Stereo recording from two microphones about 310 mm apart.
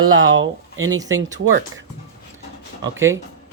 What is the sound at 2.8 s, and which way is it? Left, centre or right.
Speech, centre.